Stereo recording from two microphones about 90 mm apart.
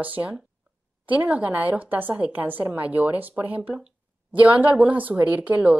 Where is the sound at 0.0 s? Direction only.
20° right (ahead or behind).